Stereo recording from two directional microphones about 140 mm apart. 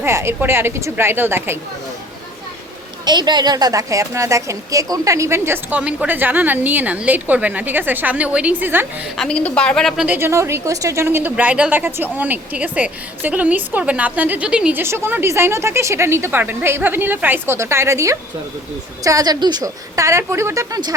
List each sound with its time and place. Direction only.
0.0 s a woman's voice: 20° right (ahead or behind)
3.0 s a woman's voice: 30° right (ahead or behind); by 8.9 s 15° right (ahead or behind)
9.1 s a woman's voice: 5° left (ahead or behind)
10.0 s a woman's voice: 15° right (ahead or behind)